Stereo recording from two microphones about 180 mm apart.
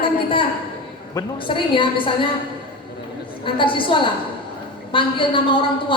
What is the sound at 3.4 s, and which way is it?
A woman's voice, 30° left (ahead or behind).